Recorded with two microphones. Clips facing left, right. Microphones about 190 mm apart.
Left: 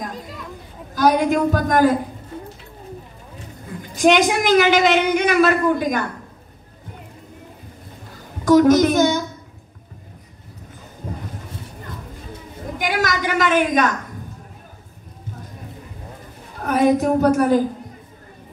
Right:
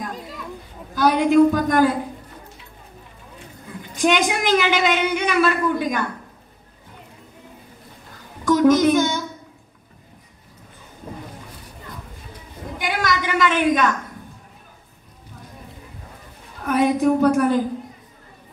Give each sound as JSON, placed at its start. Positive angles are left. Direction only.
{"t": 0.9, "sound": "a woman's voice", "side_deg": 45}
{"t": 3.9, "sound": "a woman's voice", "side_deg": 45}
{"t": 8.5, "sound": "a child's voice", "side_deg": 45}
{"t": 12.7, "sound": "a sound", "side_deg": 45}
{"t": 16.6, "sound": "a woman's voice", "side_deg": 45}